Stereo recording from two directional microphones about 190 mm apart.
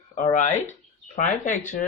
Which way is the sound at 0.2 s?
40° left (ahead or behind).